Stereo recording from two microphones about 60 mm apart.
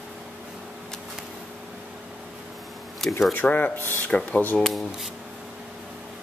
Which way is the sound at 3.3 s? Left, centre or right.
Left.